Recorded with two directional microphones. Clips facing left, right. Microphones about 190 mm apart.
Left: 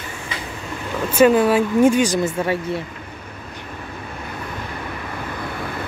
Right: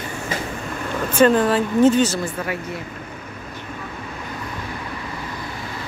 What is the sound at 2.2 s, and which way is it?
Speech, 30° left (ahead or behind).